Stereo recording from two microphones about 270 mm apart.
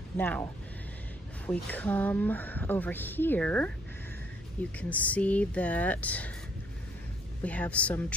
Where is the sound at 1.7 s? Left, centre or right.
Centre.